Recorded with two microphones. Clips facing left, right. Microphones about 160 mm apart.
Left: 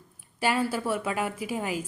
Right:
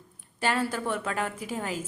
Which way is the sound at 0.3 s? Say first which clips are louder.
Left 1 dB; 10° left (ahead or behind).